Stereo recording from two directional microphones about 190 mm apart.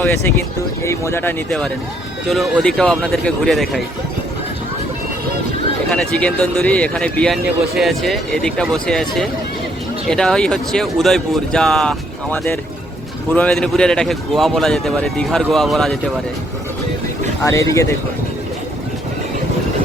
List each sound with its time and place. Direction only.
0.0 s speech: 15° left (ahead or behind)
5.9 s speech: 5° left (ahead or behind)
17.4 s speech: 15° left (ahead or behind)